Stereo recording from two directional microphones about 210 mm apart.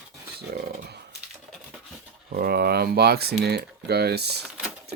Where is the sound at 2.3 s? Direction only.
45° right (ahead or behind).